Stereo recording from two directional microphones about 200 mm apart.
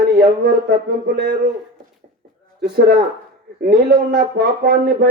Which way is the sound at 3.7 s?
50° right (ahead or behind).